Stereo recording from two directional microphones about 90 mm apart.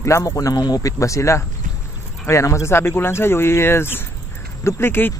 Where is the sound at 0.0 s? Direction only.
35° left (ahead or behind).